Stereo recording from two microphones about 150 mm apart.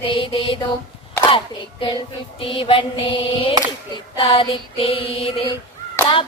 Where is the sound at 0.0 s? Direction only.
35° left (ahead or behind).